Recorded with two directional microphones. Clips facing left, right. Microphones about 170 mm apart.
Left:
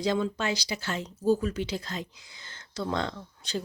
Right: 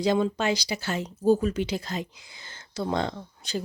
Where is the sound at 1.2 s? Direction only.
20° right (ahead or behind).